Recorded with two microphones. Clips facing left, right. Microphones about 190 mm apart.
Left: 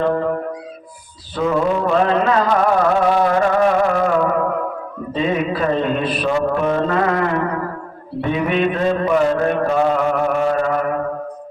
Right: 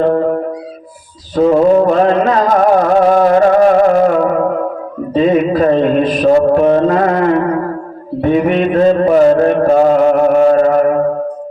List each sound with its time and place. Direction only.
0.0 s music: 35° right (ahead or behind)
1.4 s music: 35° right (ahead or behind)
5.1 s a sound: 40° right (ahead or behind)
8.2 s mantra: 45° right (ahead or behind)